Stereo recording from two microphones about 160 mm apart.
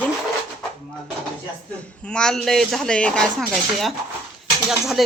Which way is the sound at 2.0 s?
5° left (ahead or behind).